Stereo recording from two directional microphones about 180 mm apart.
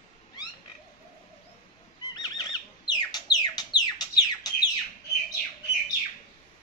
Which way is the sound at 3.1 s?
20° left (ahead or behind).